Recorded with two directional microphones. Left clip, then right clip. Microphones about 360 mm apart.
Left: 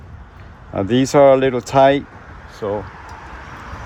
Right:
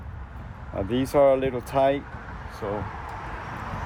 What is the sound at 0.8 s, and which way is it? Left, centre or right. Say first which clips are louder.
Speech: left 8 dB; left.